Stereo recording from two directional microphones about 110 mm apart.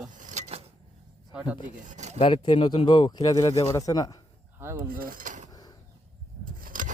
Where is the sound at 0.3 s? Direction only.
75° right (ahead or behind).